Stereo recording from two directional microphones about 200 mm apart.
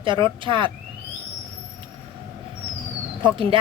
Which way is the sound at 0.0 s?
25° right (ahead or behind).